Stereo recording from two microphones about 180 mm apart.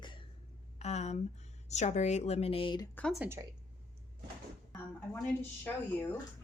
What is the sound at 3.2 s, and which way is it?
Speech, 15° right (ahead or behind).